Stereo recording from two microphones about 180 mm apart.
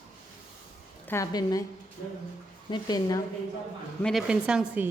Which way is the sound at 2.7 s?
20° left (ahead or behind).